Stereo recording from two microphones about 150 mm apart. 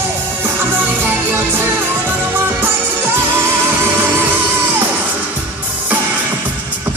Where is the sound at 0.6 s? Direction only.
15° right (ahead or behind).